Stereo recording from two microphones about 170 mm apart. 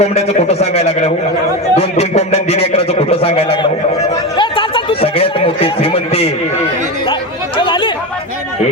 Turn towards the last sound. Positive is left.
turn(degrees=30)  # may be behind; listen again after turning